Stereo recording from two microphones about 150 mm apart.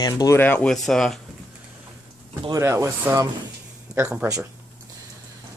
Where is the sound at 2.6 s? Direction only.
15° right (ahead or behind).